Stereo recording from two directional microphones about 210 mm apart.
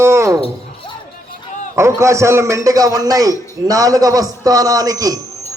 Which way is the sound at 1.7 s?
15° right (ahead or behind).